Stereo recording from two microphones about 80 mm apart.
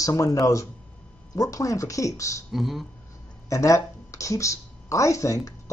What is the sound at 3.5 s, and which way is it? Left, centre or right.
Speech, left.